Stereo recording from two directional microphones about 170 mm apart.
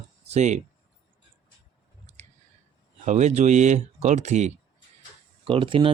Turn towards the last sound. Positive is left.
turn(degrees=-30)  # may be behind; listen again after turning